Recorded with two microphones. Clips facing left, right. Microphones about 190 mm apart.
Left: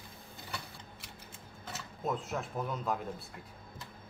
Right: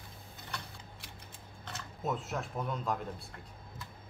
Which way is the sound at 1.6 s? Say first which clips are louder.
Even; centre (ahead or behind).